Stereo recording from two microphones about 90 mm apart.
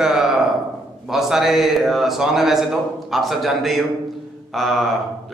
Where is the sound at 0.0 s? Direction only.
5° right (ahead or behind).